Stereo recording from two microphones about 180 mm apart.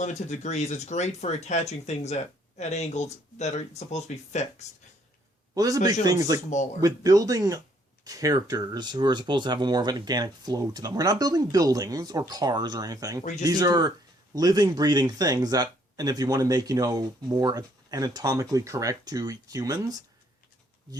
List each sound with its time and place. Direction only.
0.0 s speech: 40° left (ahead or behind)
5.5 s speech: 20° right (ahead or behind)